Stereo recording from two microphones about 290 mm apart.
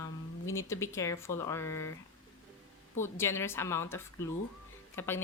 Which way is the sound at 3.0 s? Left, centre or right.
Centre.